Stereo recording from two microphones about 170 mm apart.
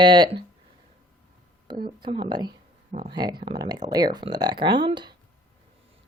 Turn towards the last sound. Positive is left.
turn(degrees=-25)  # may be behind; listen again after turning